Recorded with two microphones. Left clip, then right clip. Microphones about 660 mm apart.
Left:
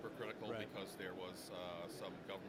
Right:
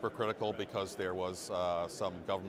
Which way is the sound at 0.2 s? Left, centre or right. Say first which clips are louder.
Right 8 dB; right.